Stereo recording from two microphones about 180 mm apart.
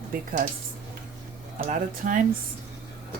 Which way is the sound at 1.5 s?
45° right (ahead or behind).